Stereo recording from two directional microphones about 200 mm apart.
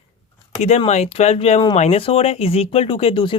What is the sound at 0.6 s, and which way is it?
Speech, 35° left (ahead or behind).